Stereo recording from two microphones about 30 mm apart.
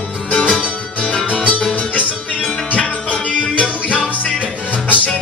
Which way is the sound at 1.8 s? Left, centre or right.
Left.